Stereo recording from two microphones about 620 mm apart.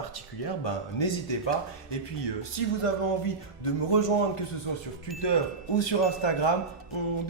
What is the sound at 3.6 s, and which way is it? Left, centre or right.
Speech, left.